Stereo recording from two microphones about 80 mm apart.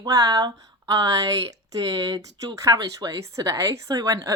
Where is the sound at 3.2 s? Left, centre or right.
Right.